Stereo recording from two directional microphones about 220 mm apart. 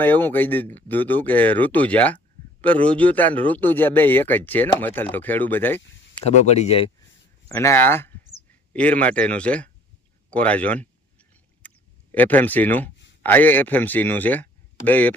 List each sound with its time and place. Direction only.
0.0 s speech: 10° left (ahead or behind)
6.1 s speech: 30° left (ahead or behind)
7.4 s speech: 15° left (ahead or behind)
10.3 s a sound: 5° left (ahead or behind)
12.1 s speech: 10° left (ahead or behind)